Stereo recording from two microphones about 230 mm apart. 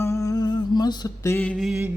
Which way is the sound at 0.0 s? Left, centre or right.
Centre.